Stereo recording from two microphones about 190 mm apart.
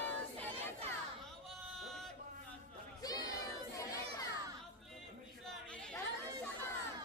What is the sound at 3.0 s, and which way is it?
Crowd, 20° left (ahead or behind).